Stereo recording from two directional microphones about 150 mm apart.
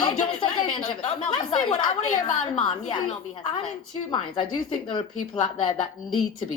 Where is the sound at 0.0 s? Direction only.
30° left (ahead or behind).